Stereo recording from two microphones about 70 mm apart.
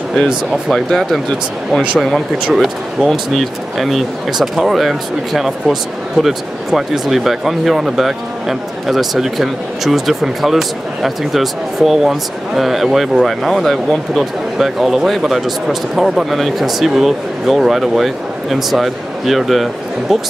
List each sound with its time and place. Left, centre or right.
0.1 s speech: centre